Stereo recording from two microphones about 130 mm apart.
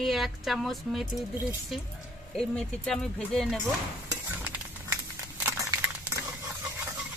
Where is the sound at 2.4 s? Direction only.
5° left (ahead or behind).